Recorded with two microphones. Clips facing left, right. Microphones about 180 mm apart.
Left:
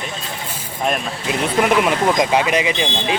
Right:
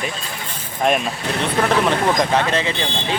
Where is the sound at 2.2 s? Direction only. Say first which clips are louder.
Left 2 dB; 10° left (ahead or behind).